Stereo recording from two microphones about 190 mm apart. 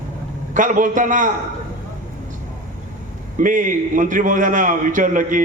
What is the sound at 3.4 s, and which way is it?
A man's voice, 45° right (ahead or behind).